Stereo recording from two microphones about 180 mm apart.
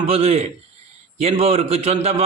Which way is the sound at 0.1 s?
35° right (ahead or behind).